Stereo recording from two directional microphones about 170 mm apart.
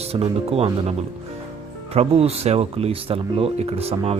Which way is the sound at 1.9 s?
35° right (ahead or behind).